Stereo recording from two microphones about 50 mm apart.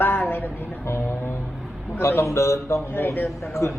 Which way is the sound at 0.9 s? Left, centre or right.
Left.